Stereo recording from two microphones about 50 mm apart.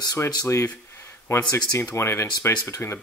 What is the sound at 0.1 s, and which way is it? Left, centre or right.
Speech, left.